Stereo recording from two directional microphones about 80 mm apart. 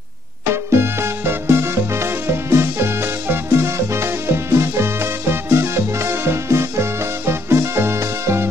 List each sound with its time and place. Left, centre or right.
0.7 s music: right